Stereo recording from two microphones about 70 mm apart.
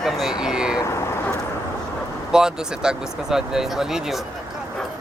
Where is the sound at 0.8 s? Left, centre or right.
Left.